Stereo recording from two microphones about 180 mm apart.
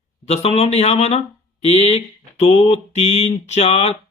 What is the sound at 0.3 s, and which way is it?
Speech, 35° left (ahead or behind).